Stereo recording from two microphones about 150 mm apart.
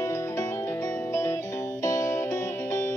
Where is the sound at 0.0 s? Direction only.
20° left (ahead or behind).